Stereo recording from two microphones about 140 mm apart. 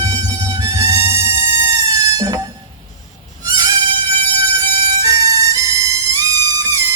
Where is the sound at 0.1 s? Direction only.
25° right (ahead or behind).